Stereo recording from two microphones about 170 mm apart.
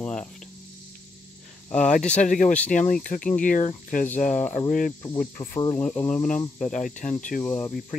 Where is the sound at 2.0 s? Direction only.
5° left (ahead or behind).